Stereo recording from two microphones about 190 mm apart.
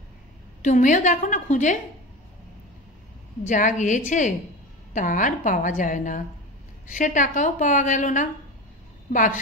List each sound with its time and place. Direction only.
0.6 s a woman's voice: 40° left (ahead or behind)
3.4 s a woman's voice: 40° left (ahead or behind)